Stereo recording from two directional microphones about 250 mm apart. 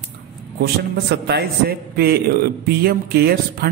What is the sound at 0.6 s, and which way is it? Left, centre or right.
A man's voice, right.